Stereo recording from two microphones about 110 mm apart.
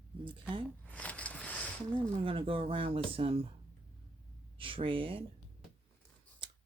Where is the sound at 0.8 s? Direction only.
15° left (ahead or behind).